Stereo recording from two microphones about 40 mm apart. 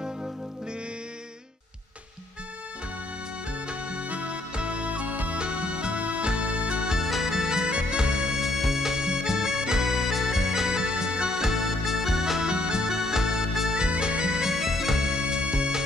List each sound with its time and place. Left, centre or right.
3.6 s music: right
5.4 s music: right
7.0 s music: centre
8.4 s music: centre
13.8 s music: right
14.5 s music: centre
15.0 s music: centre